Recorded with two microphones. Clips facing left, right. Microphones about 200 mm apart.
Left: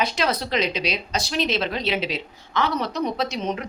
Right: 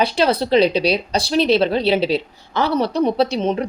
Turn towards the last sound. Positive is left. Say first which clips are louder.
# right 8 dB
turn(degrees=-30)  # may be behind; listen again after turning